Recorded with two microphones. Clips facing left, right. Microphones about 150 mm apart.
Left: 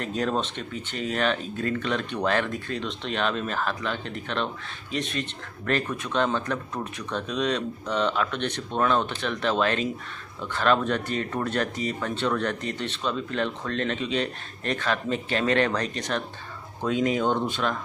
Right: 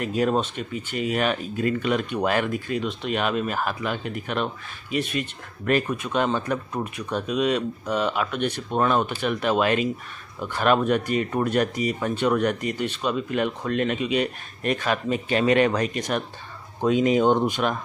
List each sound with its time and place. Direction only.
0.0 s speech: 10° right (ahead or behind)